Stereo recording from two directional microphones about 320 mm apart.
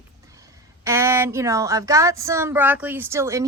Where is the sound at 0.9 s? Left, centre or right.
Centre.